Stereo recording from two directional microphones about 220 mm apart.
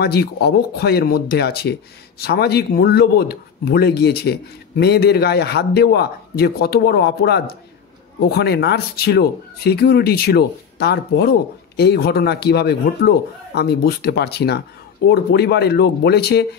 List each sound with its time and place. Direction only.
0.0 s speech: 45° left (ahead or behind)